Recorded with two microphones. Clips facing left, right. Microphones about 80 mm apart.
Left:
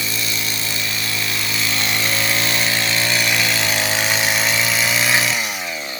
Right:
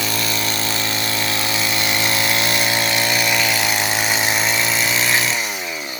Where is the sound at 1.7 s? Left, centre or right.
Centre.